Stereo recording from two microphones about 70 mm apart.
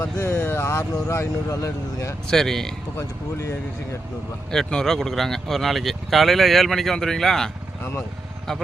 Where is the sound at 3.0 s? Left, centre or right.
Left.